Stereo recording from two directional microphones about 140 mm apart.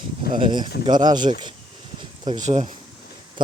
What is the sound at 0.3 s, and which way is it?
Speech, 35° right (ahead or behind).